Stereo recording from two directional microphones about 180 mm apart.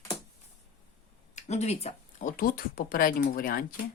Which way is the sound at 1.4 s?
40° left (ahead or behind).